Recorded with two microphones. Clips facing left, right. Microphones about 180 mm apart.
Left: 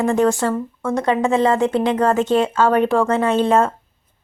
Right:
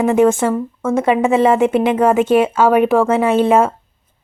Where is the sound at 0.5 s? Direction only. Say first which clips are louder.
Right 4 dB; 5° right (ahead or behind).